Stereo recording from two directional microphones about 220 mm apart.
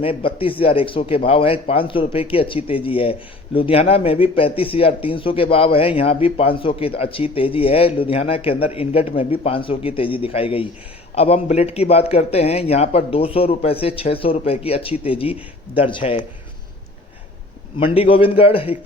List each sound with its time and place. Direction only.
0.0 s speech: 25° left (ahead or behind)
17.7 s speech: 25° left (ahead or behind)